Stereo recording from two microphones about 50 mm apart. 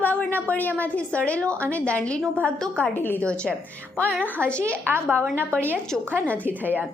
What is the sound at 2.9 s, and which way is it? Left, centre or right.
Speech, left.